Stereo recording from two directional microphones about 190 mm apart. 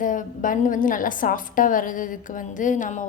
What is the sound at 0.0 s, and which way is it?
A woman's voice, 45° left (ahead or behind).